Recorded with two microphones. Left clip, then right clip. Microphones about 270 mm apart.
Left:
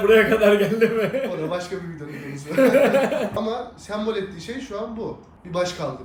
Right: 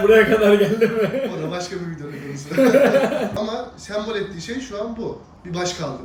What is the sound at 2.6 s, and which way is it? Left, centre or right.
Speech, centre.